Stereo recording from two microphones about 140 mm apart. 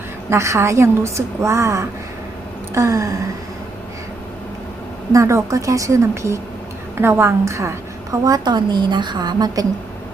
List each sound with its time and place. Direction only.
0.3 s a woman's voice: 20° right (ahead or behind)
5.1 s a woman's voice: 20° right (ahead or behind)